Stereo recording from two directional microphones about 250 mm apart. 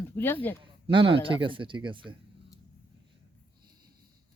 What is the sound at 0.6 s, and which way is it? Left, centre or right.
Speech, right.